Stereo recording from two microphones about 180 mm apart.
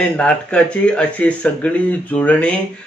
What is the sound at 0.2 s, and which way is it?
Speech, 5° left (ahead or behind).